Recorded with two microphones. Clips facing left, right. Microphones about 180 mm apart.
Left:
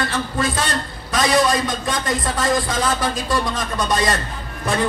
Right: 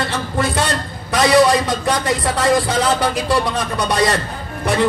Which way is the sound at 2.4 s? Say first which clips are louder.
Right 5 dB; 70° right (ahead or behind).